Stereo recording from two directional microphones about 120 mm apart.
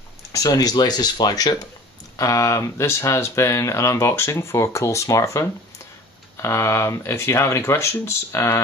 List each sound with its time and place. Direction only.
0.3 s speech: 30° left (ahead or behind)